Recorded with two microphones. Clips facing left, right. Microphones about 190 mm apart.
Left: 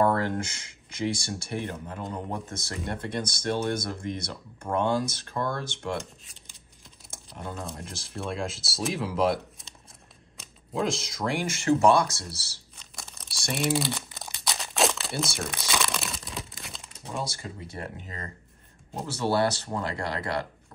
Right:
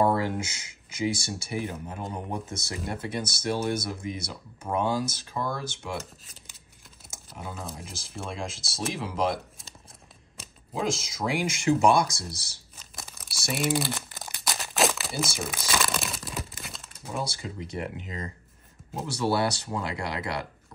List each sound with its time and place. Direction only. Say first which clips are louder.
0.0 s speech: even; 10° right (ahead or behind)
12.7 s crumpling: right 1 dB; centre (ahead or behind)
17.2 s speech: right 2 dB; 20° right (ahead or behind)